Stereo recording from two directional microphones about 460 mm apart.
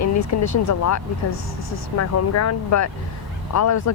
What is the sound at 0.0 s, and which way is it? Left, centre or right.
Speech, left.